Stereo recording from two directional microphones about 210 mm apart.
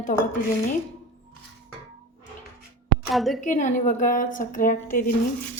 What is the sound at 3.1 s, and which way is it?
Speech, centre (ahead or behind).